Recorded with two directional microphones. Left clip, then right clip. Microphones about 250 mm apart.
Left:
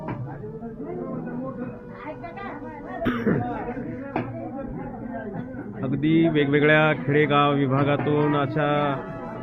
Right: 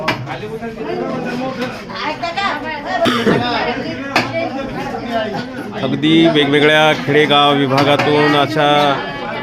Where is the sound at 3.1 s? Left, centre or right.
Centre.